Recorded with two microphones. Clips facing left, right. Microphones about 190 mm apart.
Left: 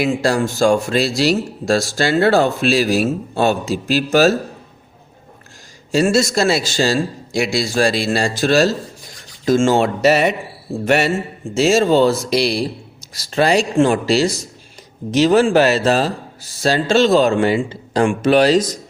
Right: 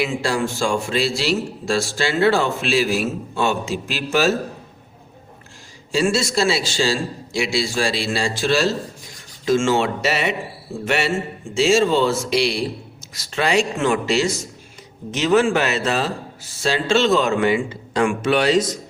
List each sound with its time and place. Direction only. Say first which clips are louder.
0.0 s speech: left 4 dB; 40° left (ahead or behind)
5.9 s a man's voice: left 4 dB; 45° left (ahead or behind)